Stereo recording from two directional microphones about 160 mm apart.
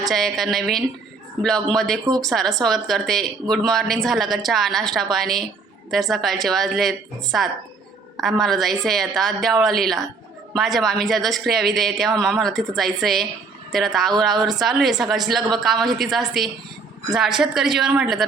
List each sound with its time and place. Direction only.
0.0 s speech: centre (ahead or behind)